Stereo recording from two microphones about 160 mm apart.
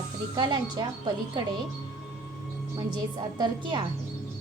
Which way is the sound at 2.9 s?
25° right (ahead or behind).